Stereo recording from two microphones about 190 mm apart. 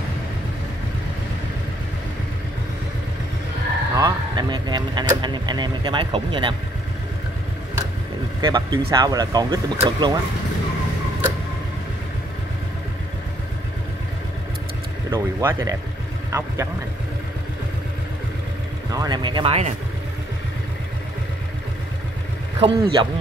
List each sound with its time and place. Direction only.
3.9 s speech: 20° right (ahead or behind)
8.4 s speech: 20° right (ahead or behind)
15.0 s speech: 15° right (ahead or behind)
18.9 s speech: 20° right (ahead or behind)
22.6 s speech: 25° right (ahead or behind)